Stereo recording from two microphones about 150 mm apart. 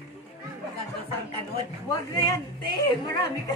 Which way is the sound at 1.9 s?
25° left (ahead or behind).